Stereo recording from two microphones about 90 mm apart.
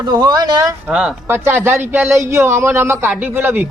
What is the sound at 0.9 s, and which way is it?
Speech, 10° right (ahead or behind).